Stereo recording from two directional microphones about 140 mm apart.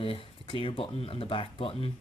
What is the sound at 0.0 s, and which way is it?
Speech, 40° left (ahead or behind).